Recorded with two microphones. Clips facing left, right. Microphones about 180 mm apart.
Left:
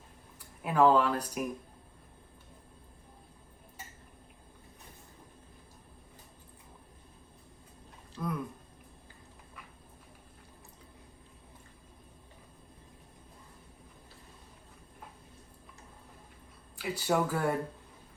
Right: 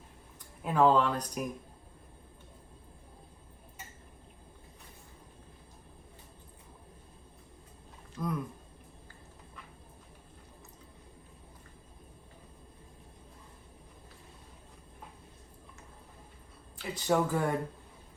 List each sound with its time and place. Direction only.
0.3 s speech: 5° left (ahead or behind)
8.1 s speech: centre (ahead or behind)
16.7 s speech: 5° left (ahead or behind)